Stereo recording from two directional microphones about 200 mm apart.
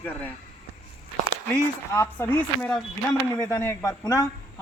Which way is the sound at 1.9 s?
10° left (ahead or behind).